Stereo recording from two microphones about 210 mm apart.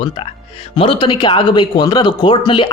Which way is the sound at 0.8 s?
25° left (ahead or behind).